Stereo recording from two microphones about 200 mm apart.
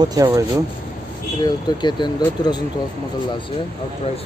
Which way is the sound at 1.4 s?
20° left (ahead or behind).